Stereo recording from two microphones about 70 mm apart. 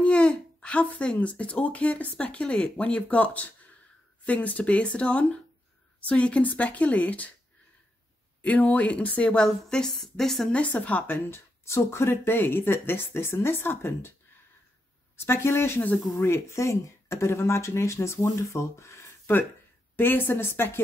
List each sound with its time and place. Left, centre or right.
0.0 s speech: centre
8.4 s a woman's voice: left; by 10.5 s centre
10.5 s speech: centre
11.2 s speech: left
15.1 s speech: left
20.0 s speech: left